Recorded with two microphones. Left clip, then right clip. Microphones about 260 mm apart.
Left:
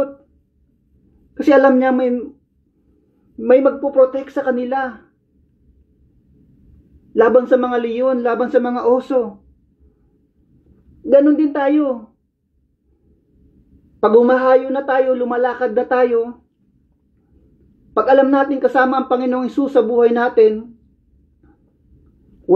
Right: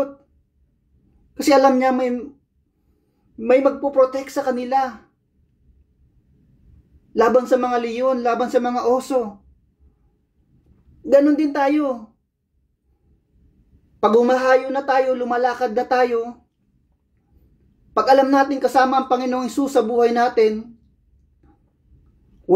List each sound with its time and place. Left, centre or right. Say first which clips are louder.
1.3 s speech: left 3 dB; right
3.3 s speech: left 3 dB; right
7.2 s speech: left 4 dB; right
11.6 s speech: left 3 dB; right
14.0 s speech: left 3 dB; right
18.0 s speech: left 2 dB; right